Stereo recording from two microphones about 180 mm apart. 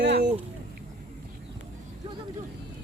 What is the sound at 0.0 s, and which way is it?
Boat, 70° right (ahead or behind).